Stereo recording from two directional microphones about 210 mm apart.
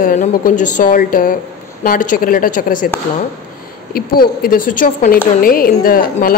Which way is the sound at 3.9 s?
45° left (ahead or behind).